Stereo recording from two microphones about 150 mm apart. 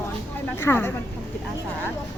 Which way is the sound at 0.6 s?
15° left (ahead or behind).